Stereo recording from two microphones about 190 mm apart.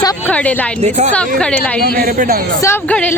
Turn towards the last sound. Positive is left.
turn(degrees=10)  # may be behind; listen again after turning